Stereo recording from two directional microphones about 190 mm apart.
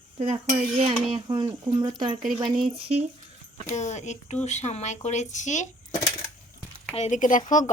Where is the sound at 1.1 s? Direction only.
25° right (ahead or behind).